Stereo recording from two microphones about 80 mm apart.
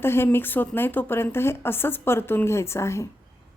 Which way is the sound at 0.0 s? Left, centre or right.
Left.